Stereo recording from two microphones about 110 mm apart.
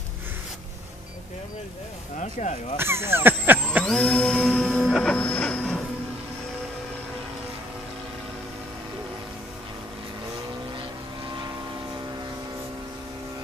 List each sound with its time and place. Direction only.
2.1 s speech: 90° left
2.8 s speech: 20° right (ahead or behind)
3.8 s music: 5° left (ahead or behind)